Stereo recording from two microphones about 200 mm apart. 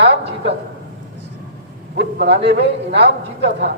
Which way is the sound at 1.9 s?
60° right (ahead or behind).